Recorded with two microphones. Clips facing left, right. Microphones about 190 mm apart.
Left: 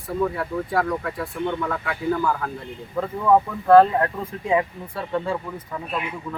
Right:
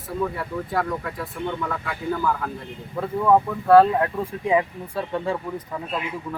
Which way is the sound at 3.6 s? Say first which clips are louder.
Left 1 dB; 5° right (ahead or behind).